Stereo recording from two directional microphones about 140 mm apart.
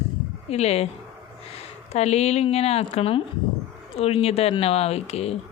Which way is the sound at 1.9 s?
50° left (ahead or behind).